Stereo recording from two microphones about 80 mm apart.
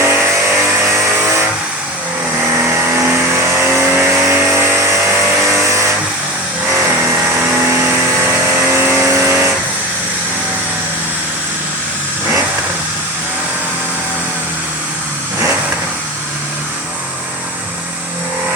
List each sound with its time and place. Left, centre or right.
0.0 s vehicle: right
2.6 s vehicle: right